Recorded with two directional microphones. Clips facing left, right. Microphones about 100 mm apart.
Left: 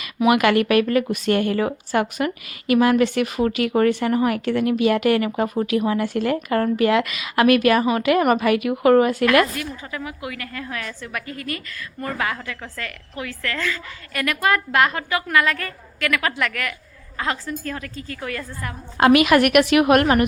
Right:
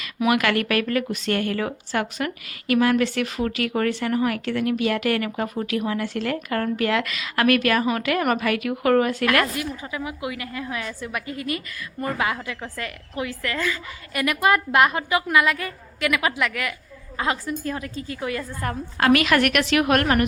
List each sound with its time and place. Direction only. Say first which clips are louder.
0.3 s speech: left 5 dB; 15° left (ahead or behind)
9.6 s a woman's voice: right 1 dB; 15° right (ahead or behind)
18.9 s speech: left 4 dB; 15° left (ahead or behind)